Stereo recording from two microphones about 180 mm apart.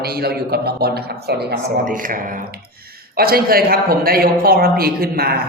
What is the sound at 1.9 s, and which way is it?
A man's voice, 50° right (ahead or behind).